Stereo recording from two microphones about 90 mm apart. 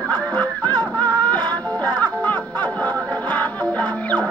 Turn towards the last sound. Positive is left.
turn(degrees=15)  # may be behind; listen again after turning